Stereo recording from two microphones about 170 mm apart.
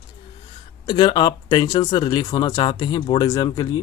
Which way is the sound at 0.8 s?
25° left (ahead or behind).